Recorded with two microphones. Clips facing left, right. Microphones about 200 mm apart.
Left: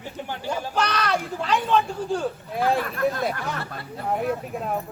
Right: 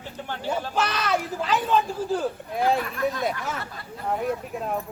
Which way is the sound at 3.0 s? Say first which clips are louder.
Left 2 dB; 55° left (ahead or behind).